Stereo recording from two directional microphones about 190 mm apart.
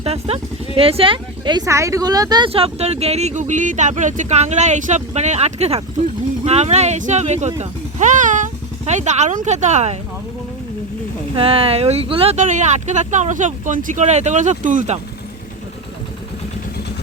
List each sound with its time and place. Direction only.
0.0 s speech: 30° right (ahead or behind)
7.6 s music: 40° right (ahead or behind)
8.9 s speech: 35° right (ahead or behind)
11.3 s speech: 30° right (ahead or behind)